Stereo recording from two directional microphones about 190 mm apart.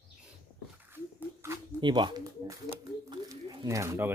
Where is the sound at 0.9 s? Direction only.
15° right (ahead or behind).